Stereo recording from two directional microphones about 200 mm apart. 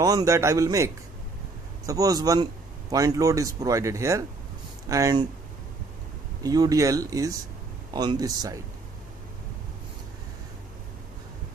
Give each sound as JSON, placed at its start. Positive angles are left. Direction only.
{"t": 0.0, "sound": "speech", "side_deg": -15}
{"t": 6.4, "sound": "speech", "side_deg": -20}